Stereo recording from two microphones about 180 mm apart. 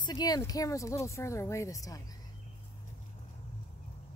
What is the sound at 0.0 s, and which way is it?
Speech, 20° left (ahead or behind).